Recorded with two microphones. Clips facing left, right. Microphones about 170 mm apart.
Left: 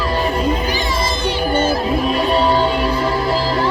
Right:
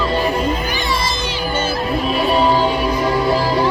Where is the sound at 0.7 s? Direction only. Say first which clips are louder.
Left 1 dB; 40° left (ahead or behind).